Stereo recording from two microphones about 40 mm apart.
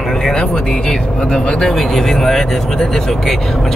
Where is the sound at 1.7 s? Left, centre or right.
Centre.